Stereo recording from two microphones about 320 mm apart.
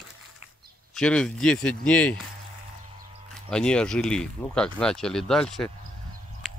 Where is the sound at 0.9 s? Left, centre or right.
Centre.